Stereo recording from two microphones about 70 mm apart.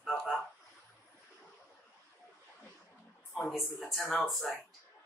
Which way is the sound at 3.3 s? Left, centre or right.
Centre.